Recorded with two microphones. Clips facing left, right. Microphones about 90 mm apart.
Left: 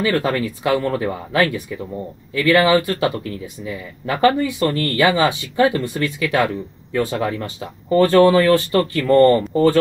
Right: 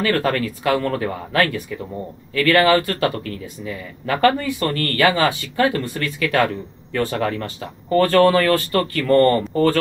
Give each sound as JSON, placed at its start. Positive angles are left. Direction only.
{"t": 0.0, "sound": "speech", "side_deg": 15}